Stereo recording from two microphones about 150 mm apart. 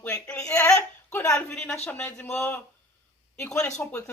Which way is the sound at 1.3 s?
5° left (ahead or behind).